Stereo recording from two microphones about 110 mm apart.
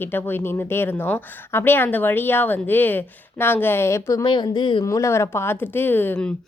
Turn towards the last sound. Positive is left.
turn(degrees=15)  # may be behind; listen again after turning